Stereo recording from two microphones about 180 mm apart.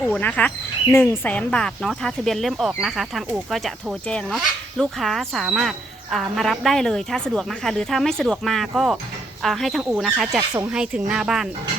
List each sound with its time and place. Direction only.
0.0 s speech: 5° left (ahead or behind)
10.2 s speech: 15° right (ahead or behind)
10.7 s speech: 5° right (ahead or behind)